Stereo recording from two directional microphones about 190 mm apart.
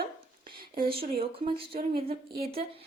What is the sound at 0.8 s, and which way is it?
Speech, 30° right (ahead or behind).